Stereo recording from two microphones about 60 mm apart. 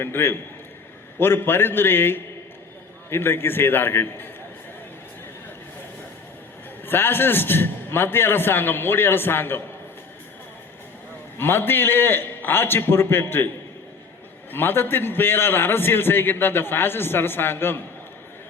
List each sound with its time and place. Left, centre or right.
0.0 s a man's voice: left
6.8 s a man's voice: left
11.3 s a man's voice: left
14.5 s a man's voice: left